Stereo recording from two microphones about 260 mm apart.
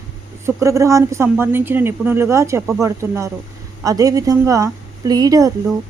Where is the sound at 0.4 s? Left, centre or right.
Centre.